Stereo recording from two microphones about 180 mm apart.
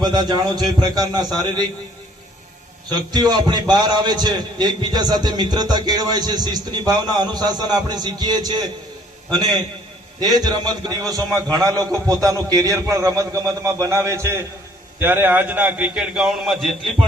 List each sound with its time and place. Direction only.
0.0 s a man's voice: 25° right (ahead or behind)
2.9 s a man's voice: 25° right (ahead or behind); by 16.7 s centre (ahead or behind)